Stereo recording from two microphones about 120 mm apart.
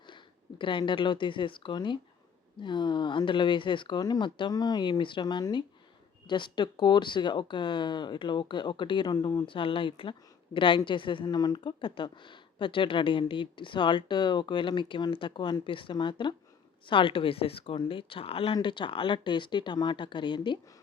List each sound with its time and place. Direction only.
0.6 s speech: 45° left (ahead or behind)